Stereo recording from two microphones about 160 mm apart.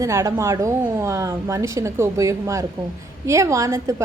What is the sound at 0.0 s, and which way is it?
A woman's voice, 20° right (ahead or behind).